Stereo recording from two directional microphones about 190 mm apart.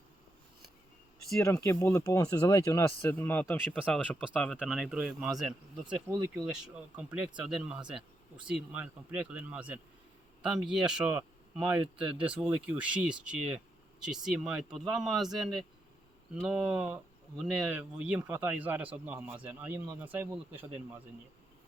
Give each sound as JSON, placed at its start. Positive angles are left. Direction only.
{"t": 1.4, "sound": "speech", "side_deg": 15}